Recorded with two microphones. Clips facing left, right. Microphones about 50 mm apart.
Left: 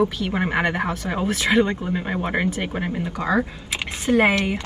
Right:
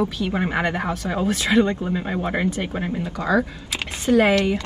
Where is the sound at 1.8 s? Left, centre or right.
Centre.